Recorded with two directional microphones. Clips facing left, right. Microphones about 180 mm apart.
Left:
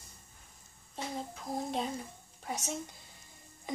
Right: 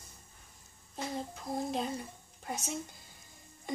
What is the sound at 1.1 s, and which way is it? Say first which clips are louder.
A child's voice: right 1 dB; centre (ahead or behind).